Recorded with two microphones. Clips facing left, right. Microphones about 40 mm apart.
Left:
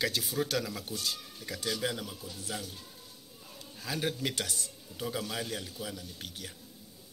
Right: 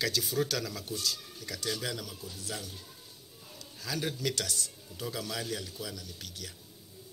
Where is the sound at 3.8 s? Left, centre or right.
Left.